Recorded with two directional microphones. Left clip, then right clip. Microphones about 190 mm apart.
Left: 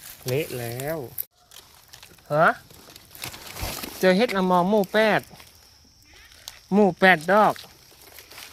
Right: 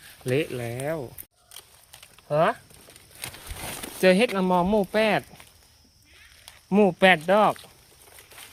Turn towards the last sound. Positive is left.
turn(degrees=10)  # may be behind; listen again after turning